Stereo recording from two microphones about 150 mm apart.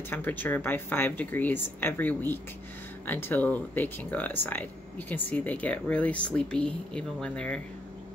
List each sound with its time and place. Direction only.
0.1 s speech: 10° left (ahead or behind)